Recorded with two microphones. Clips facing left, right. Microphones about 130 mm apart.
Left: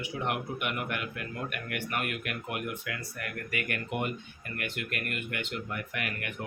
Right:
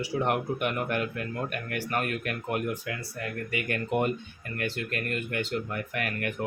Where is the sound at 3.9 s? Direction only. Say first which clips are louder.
Right 6 dB; 40° right (ahead or behind).